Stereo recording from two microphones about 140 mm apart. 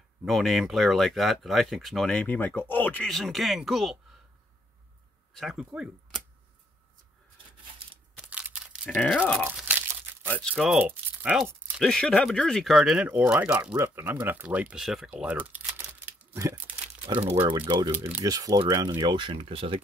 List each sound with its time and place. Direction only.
0.2 s speech: centre (ahead or behind)
3.1 s speech: centre (ahead or behind)
5.3 s speech: centre (ahead or behind)
8.3 s a sound: 10° right (ahead or behind)
8.8 s speech: 5° left (ahead or behind)
9.5 s tearing: 10° right (ahead or behind)
10.2 s speech: 10° left (ahead or behind)
10.5 s speech: centre (ahead or behind)
10.8 s speech: 15° right (ahead or behind)
11.8 s speech: 5° left (ahead or behind)
15.0 s crumpling: 10° right (ahead or behind)
17.2 s speech: 45° right (ahead or behind)
17.6 s speech: 30° right (ahead or behind)